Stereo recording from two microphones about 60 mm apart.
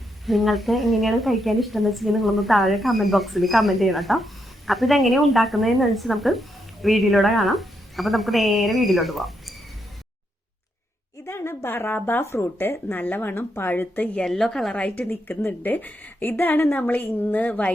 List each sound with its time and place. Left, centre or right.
0.3 s a woman's voice: centre
11.3 s a woman's voice: left
14.3 s a woman's voice: centre
14.8 s a woman's voice: left